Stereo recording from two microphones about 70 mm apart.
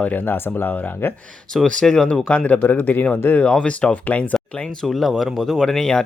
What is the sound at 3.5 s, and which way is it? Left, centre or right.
Speech, centre.